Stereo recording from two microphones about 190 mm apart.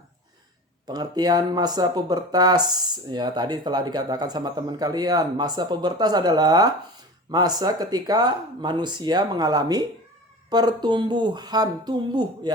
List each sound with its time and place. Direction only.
0.9 s speech: 20° right (ahead or behind)